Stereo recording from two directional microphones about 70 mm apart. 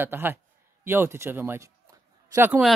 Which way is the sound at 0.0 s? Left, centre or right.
Right.